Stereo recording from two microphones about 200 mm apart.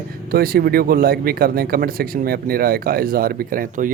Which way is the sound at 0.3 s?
50° right (ahead or behind).